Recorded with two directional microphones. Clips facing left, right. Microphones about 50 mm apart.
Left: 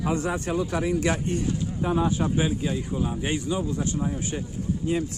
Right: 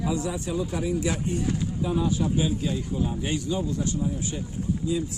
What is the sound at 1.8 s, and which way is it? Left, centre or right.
Speech, left.